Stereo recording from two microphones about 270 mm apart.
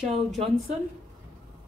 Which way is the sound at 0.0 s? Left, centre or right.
Centre.